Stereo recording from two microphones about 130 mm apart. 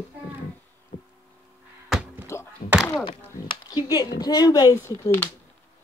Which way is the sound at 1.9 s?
10° right (ahead or behind).